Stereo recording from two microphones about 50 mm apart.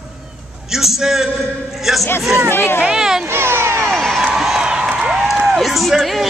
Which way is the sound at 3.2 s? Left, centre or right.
Right.